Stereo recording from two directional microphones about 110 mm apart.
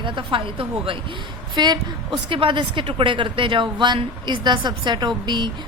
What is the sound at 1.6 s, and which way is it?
A woman's voice, 45° right (ahead or behind).